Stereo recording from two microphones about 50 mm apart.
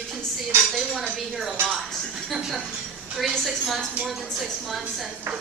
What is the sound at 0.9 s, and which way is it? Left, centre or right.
Speech, centre.